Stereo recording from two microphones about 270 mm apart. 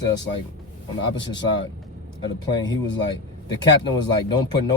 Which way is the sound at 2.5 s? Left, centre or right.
Centre.